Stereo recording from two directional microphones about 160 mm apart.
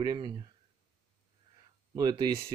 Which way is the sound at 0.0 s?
25° right (ahead or behind).